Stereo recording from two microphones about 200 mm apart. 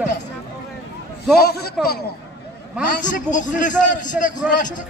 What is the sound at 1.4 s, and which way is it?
Speech, 50° left (ahead or behind).